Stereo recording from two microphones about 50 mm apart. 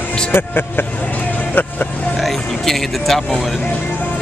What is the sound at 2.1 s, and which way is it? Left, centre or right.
Speech, centre.